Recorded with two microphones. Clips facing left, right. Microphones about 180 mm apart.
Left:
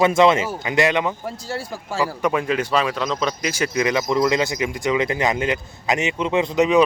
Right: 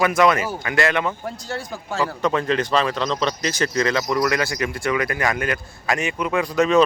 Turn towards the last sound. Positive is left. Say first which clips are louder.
# left 1 dB
turn(degrees=15)  # may be behind; listen again after turning